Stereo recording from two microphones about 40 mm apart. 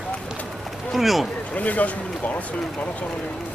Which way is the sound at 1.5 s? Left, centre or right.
Left.